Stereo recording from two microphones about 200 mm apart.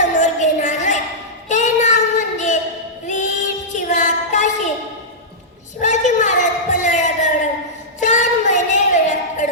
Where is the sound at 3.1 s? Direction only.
40° left (ahead or behind).